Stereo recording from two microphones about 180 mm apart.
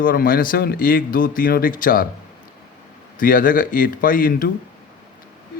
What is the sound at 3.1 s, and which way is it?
Speech, 50° left (ahead or behind).